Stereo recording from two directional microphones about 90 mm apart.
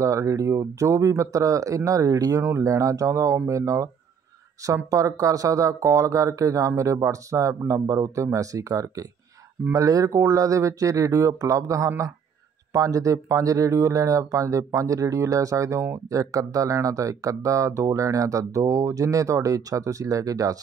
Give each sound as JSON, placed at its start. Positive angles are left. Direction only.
{"t": 0.0, "sound": "speech", "side_deg": -35}